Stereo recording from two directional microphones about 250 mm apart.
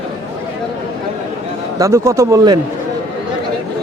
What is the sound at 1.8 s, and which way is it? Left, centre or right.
Speech, centre.